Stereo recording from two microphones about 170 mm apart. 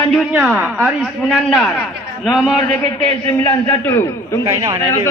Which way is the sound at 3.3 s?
20° left (ahead or behind).